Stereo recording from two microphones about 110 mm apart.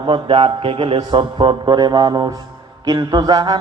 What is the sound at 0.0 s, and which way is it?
A man's voice, 50° right (ahead or behind).